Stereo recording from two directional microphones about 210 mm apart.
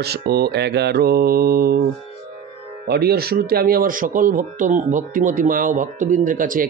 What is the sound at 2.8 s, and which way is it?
Speech, 50° right (ahead or behind).